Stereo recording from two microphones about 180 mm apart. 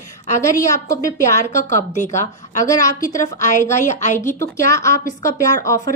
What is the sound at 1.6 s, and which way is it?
A woman's voice, 40° left (ahead or behind).